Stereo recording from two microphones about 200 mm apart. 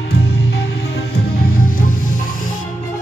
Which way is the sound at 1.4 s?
45° left (ahead or behind).